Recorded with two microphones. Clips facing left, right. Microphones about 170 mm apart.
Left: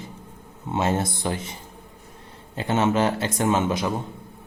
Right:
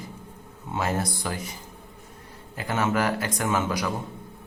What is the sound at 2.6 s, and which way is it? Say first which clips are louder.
A man's voice: left 4 dB; 25° left (ahead or behind).